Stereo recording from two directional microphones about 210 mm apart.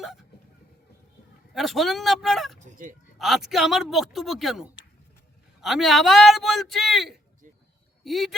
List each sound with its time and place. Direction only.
1.5 s a man's voice: centre (ahead or behind)
2.6 s speech: 35° right (ahead or behind)
3.2 s a man's voice: centre (ahead or behind)